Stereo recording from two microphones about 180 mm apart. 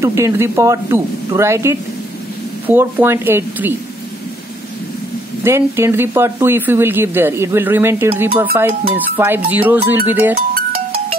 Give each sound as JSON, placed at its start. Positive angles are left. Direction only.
{"t": 0.0, "sound": "speech", "side_deg": -15}
{"t": 5.4, "sound": "speech", "side_deg": -15}
{"t": 10.5, "sound": "music", "side_deg": -55}